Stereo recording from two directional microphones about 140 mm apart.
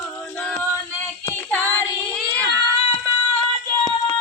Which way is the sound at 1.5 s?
10° left (ahead or behind).